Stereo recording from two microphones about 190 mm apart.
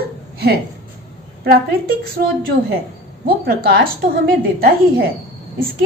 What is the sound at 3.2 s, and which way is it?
A woman's voice, 50° right (ahead or behind).